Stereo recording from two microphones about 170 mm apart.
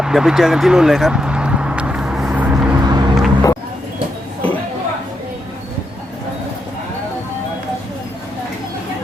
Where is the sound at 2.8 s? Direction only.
25° right (ahead or behind).